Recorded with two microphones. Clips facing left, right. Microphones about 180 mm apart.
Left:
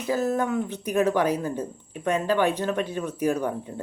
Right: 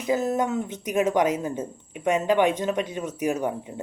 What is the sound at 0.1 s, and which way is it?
Speech, 20° right (ahead or behind).